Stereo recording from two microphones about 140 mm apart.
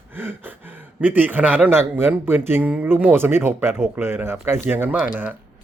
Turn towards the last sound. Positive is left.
turn(degrees=-10)  # may be behind; listen again after turning